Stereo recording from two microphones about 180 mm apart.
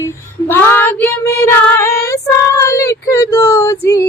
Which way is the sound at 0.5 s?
10° left (ahead or behind).